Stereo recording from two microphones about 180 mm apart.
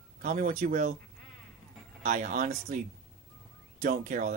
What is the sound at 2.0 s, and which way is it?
Speech, 45° right (ahead or behind).